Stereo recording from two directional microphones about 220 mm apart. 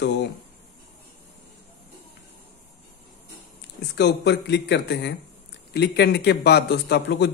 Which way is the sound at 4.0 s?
50° left (ahead or behind).